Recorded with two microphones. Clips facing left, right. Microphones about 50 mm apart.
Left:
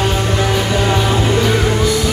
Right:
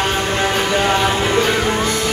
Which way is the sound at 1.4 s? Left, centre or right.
Right.